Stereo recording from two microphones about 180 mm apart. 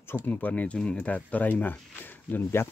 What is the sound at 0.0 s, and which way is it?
Speech, 10° left (ahead or behind).